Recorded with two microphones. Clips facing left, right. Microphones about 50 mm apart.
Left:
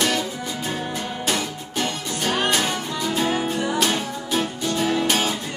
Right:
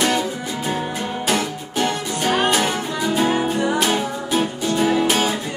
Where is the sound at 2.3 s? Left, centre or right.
Centre.